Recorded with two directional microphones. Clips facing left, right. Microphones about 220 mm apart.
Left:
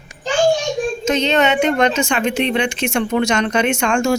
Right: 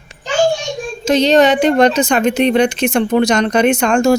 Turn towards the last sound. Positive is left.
turn(degrees=-40)  # may be behind; listen again after turning